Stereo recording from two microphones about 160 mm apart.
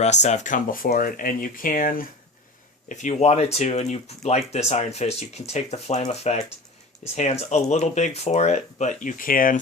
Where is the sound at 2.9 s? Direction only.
50° left (ahead or behind).